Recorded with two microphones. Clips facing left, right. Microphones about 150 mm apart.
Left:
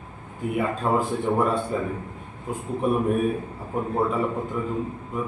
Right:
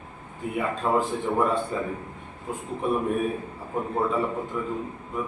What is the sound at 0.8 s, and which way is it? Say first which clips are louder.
Mantra: even; 10° left (ahead or behind).